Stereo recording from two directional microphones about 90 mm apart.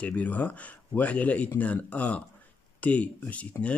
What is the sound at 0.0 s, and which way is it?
Speech, 15° left (ahead or behind).